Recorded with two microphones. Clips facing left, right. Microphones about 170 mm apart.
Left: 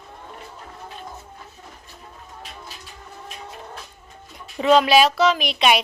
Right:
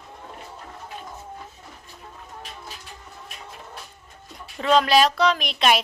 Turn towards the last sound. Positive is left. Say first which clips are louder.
# left 2 dB
turn(degrees=0)  # may be behind; listen again after turning